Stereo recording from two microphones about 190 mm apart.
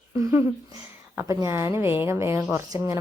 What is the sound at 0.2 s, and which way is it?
A woman's voice, 15° right (ahead or behind).